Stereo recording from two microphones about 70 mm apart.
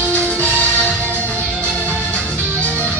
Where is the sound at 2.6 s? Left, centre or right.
Centre.